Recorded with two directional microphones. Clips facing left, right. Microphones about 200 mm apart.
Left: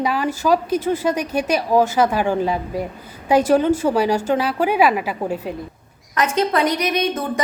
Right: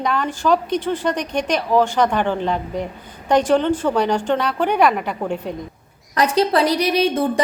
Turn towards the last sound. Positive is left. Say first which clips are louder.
# right 3 dB
turn(degrees=-30)  # may be behind; listen again after turning